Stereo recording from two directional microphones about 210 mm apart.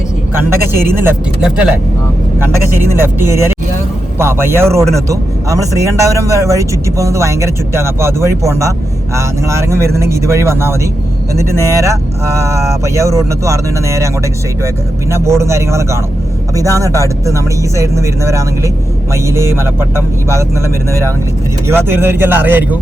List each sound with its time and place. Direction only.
0.3 s speech: 10° right (ahead or behind)
15.1 s speech: 15° right (ahead or behind)
21.7 s speech: 10° right (ahead or behind)